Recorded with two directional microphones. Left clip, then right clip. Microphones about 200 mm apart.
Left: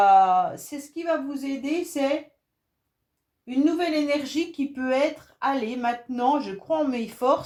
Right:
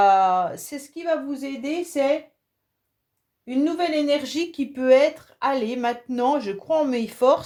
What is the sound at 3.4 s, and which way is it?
A woman's voice, 45° right (ahead or behind).